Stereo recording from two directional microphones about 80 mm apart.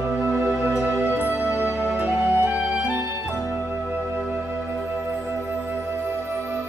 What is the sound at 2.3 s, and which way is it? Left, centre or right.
Music, right.